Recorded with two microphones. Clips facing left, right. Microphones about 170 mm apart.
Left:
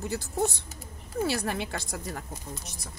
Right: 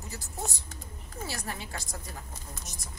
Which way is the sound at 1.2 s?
70° left (ahead or behind).